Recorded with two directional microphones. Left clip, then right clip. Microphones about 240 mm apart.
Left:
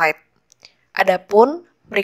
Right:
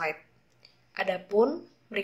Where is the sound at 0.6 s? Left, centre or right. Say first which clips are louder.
Left 14 dB; left.